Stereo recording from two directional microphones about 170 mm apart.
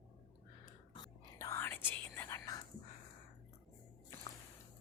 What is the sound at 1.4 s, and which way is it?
Whispering, 15° left (ahead or behind).